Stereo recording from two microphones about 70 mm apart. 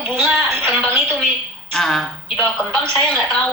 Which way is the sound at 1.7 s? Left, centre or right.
Centre.